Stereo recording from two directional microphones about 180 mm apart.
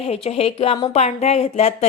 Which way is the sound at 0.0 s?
35° left (ahead or behind).